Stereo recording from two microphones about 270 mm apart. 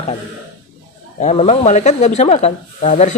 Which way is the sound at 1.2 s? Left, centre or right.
Left.